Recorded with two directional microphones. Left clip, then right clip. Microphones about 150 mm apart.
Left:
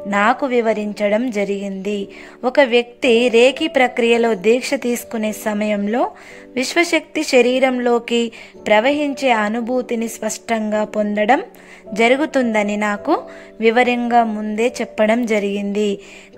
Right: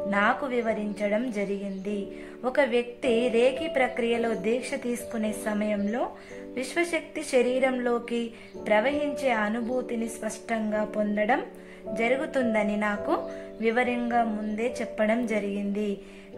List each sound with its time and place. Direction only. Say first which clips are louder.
0.1 s a woman's voice: left 10 dB; 60° left (ahead or behind)